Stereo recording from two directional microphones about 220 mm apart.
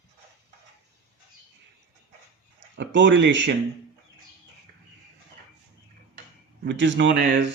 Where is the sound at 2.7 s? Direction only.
55° right (ahead or behind).